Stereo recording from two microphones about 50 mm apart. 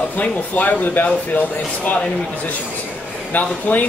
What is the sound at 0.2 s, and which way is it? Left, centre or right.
Speech, left.